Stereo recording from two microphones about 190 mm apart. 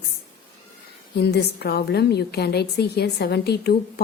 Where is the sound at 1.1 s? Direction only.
60° left (ahead or behind).